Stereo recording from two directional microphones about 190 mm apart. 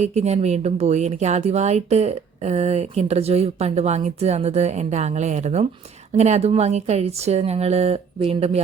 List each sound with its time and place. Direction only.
0.0 s speech: 35° right (ahead or behind)